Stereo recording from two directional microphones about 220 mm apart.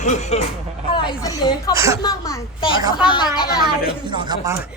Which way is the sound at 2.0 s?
15° left (ahead or behind).